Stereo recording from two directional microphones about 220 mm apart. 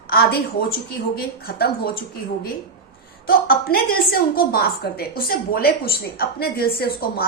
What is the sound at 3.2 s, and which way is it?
A woman's voice, 45° left (ahead or behind).